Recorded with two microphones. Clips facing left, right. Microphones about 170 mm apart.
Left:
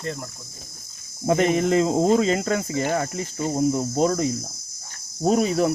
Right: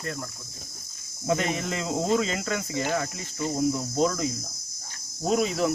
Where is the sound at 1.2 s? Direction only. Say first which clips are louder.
Left 7 dB; 40° left (ahead or behind).